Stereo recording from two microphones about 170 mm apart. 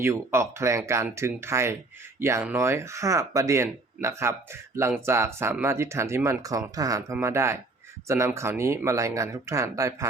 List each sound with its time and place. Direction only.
0.0 s speech: 15° right (ahead or behind)